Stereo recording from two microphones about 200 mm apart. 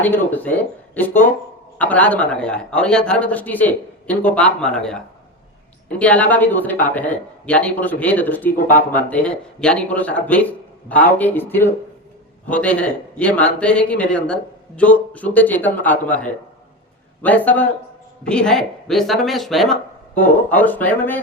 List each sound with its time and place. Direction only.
0.0 s speech: 10° left (ahead or behind)
8.5 s speech: 40° left (ahead or behind)
8.9 s speech: 5° left (ahead or behind)